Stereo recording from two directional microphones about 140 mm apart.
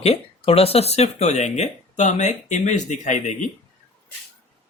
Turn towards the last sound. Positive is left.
turn(degrees=60)  # may be behind; listen again after turning